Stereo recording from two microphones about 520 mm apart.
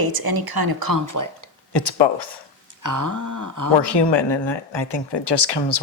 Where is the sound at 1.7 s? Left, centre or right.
Left.